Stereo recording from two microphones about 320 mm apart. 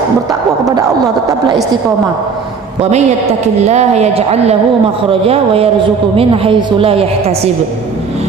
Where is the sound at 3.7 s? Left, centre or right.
Right.